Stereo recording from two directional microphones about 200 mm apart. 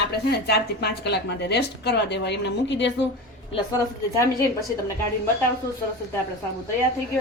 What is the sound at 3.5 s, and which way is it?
Speech, 20° left (ahead or behind).